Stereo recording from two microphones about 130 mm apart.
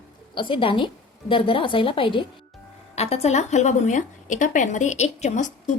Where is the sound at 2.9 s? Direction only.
55° left (ahead or behind).